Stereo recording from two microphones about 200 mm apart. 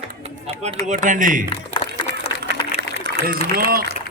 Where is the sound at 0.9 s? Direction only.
40° right (ahead or behind).